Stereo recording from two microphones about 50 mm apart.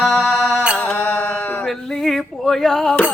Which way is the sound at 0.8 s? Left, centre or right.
Left.